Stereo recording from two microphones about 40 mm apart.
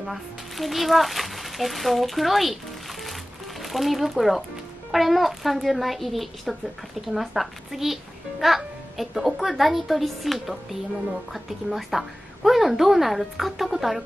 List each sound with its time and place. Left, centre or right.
0.0 s a woman's voice: centre
3.6 s a woman's voice: centre